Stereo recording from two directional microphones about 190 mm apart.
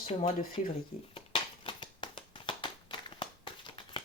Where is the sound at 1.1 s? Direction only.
25° left (ahead or behind).